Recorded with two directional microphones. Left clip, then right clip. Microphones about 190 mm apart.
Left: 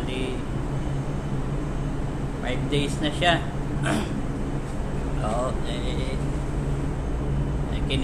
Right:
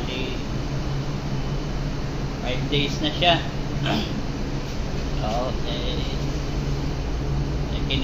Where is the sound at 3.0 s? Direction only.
15° left (ahead or behind).